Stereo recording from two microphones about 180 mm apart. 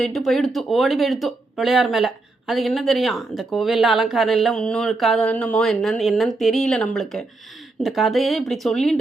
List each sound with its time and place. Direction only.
0.0 s speech: centre (ahead or behind)